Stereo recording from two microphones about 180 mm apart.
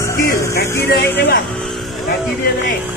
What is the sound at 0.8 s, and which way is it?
Music, 60° left (ahead or behind).